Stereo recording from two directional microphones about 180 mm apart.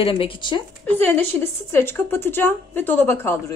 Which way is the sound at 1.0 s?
10° left (ahead or behind).